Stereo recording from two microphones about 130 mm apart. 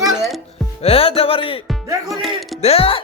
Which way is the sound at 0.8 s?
50° left (ahead or behind).